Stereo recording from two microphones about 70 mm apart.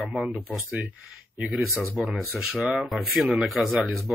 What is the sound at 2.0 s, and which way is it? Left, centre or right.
Speech, centre.